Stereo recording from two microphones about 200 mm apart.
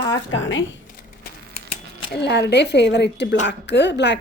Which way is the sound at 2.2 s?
60° left (ahead or behind).